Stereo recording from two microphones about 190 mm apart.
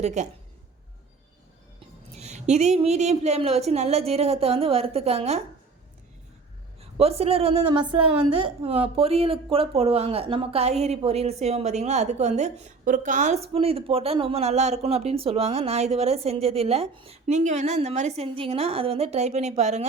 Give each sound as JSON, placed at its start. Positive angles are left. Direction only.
{"t": 0.0, "sound": "a woman's voice", "side_deg": -40}
{"t": 2.1, "sound": "a woman's voice", "side_deg": -35}
{"t": 6.9, "sound": "a woman's voice", "side_deg": -30}